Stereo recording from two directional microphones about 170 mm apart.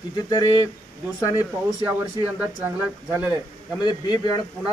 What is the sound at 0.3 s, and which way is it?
Speech, 25° left (ahead or behind).